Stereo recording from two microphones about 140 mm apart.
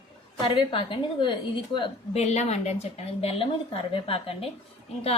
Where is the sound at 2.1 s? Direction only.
50° left (ahead or behind).